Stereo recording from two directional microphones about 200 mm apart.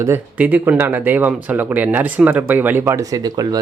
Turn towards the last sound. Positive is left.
turn(degrees=-20)  # may be behind; listen again after turning